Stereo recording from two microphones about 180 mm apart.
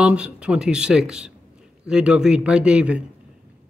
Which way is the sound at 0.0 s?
5° right (ahead or behind).